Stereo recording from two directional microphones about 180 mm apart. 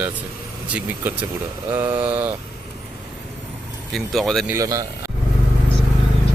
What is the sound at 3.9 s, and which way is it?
Speech, centre (ahead or behind).